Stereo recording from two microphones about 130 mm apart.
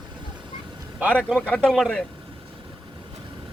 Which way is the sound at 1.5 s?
5° left (ahead or behind).